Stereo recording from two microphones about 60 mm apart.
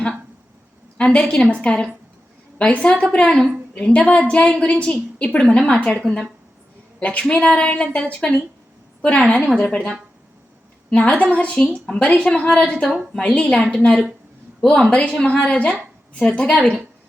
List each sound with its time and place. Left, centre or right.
0.9 s a woman's voice: centre
7.0 s a woman's voice: left